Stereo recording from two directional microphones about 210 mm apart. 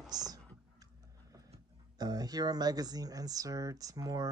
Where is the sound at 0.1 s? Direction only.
20° right (ahead or behind).